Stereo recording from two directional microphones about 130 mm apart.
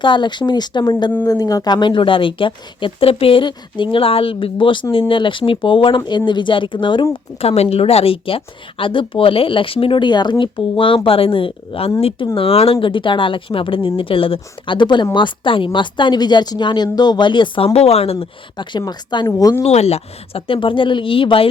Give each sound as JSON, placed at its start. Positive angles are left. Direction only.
{"t": 0.0, "sound": "speech", "side_deg": 35}
{"t": 17.7, "sound": "speech", "side_deg": 50}
{"t": 18.5, "sound": "speech", "side_deg": 35}
{"t": 19.6, "sound": "speech", "side_deg": 55}